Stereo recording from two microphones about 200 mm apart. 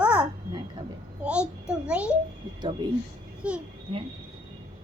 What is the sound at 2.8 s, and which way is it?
Speech, 20° right (ahead or behind).